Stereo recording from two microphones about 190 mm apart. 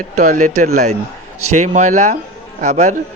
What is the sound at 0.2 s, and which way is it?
A man's voice, 40° right (ahead or behind).